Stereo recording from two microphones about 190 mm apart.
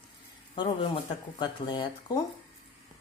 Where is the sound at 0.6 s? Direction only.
25° left (ahead or behind).